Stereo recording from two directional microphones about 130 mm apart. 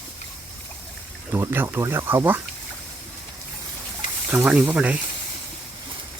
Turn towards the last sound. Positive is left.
turn(degrees=-10)  # may be behind; listen again after turning